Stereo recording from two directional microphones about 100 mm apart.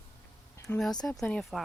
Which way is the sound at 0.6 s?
5° left (ahead or behind).